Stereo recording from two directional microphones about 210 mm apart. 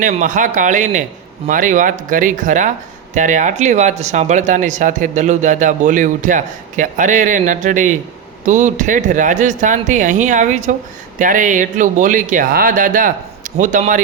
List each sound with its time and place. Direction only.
0.0 s speech: 35° right (ahead or behind)